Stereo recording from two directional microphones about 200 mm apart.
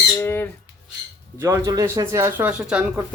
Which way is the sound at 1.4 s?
15° right (ahead or behind).